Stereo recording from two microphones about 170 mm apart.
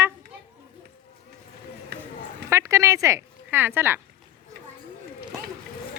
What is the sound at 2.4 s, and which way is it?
Speech, 15° right (ahead or behind).